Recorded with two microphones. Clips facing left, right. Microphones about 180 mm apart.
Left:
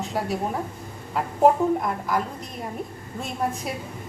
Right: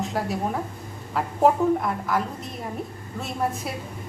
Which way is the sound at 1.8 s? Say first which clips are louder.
Even; centre (ahead or behind).